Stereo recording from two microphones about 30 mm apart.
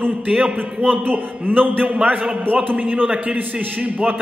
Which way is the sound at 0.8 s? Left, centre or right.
Right.